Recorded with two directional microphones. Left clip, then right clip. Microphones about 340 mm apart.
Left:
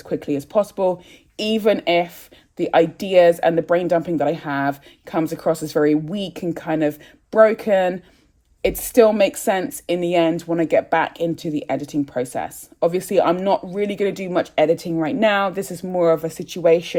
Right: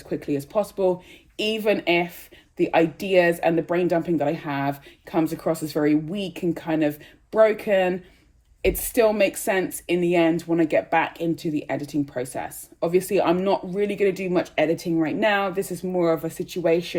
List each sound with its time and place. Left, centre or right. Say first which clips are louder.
0.1 s speech: left 4 dB; left